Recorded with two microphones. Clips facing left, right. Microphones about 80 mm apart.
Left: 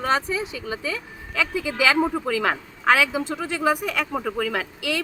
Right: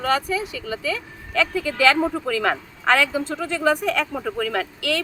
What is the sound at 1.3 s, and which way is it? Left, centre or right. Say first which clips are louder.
Speech: right 3 dB; centre.